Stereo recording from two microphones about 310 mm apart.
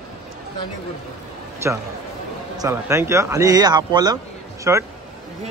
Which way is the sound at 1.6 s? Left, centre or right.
Centre.